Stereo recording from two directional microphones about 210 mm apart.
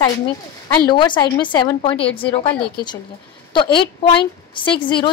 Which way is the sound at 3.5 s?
20° left (ahead or behind).